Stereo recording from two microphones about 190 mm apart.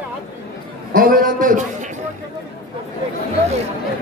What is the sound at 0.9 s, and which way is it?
Speech, 45° right (ahead or behind).